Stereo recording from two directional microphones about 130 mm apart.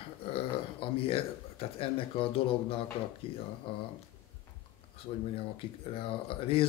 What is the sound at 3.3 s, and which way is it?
Speech, 45° left (ahead or behind).